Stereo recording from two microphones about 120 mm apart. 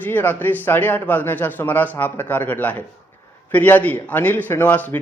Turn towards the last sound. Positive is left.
turn(degrees=15)  # may be behind; listen again after turning